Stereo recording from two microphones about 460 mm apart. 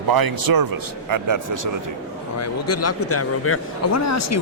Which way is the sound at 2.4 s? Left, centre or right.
Left.